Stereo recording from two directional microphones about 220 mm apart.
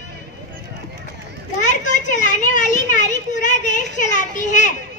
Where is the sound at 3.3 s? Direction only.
35° left (ahead or behind).